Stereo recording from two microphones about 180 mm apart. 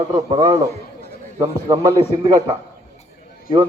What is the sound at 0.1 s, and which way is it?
Speech, 20° right (ahead or behind).